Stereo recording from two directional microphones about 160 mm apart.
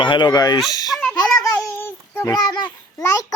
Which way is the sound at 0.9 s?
5° left (ahead or behind).